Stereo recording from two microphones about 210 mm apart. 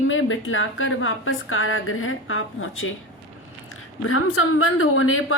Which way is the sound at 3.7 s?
90° left.